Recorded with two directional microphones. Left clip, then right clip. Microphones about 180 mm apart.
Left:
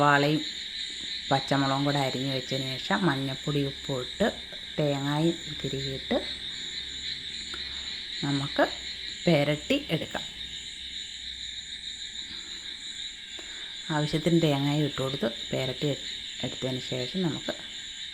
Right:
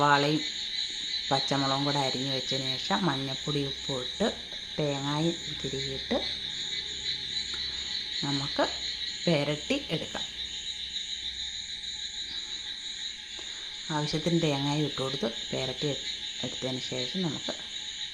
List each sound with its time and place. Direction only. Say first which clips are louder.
0.0 s speech: left 1 dB; 15° left (ahead or behind)
8.2 s speech: left 4 dB; 15° left (ahead or behind)
13.9 s speech: left 3 dB; 15° left (ahead or behind)